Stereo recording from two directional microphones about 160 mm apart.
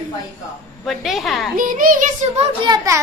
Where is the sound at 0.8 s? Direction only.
Centre (ahead or behind).